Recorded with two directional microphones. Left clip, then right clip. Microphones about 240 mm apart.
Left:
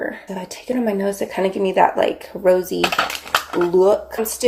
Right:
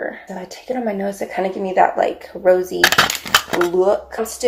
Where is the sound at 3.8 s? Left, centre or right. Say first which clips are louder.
Left 1 dB; left.